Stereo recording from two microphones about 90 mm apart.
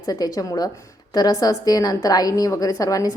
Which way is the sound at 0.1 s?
45° left (ahead or behind).